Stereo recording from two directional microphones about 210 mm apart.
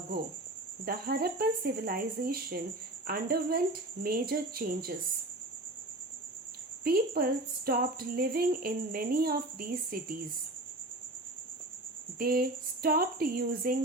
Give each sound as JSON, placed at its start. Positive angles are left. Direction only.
{"t": 0.9, "sound": "speech", "side_deg": -45}
{"t": 6.8, "sound": "speech", "side_deg": -45}
{"t": 12.2, "sound": "speech", "side_deg": -45}